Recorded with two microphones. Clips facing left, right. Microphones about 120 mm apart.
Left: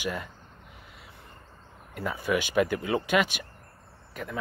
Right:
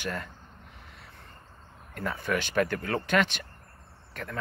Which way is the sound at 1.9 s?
10° left (ahead or behind).